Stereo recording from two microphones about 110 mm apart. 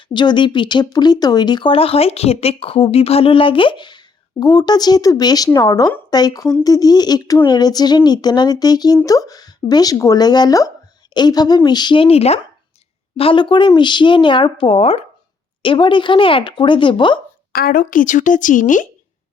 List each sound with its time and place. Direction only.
0.1 s speech: 45° left (ahead or behind)
12.0 s speech: 70° left (ahead or behind)
13.1 s speech: 55° left (ahead or behind)
15.6 s speech: 50° left (ahead or behind)